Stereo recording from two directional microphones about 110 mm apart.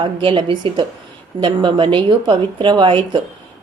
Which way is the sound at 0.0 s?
50° right (ahead or behind).